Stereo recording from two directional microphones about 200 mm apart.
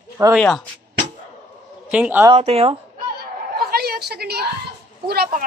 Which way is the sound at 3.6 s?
50° right (ahead or behind).